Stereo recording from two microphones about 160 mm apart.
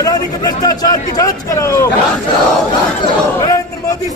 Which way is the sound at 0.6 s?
25° left (ahead or behind).